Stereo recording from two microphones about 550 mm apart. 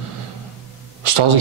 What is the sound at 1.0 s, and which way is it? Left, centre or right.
Speech, right.